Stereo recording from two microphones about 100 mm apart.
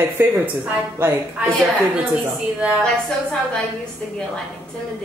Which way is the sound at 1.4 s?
10° right (ahead or behind).